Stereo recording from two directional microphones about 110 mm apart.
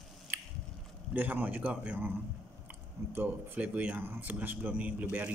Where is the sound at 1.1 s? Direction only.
15° right (ahead or behind).